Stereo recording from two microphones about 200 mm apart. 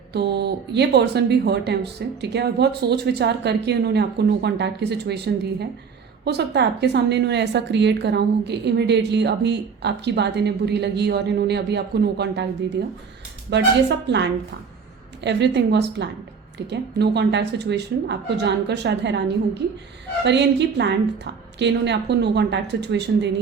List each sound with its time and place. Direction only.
0.1 s a woman's voice: 55° right (ahead or behind)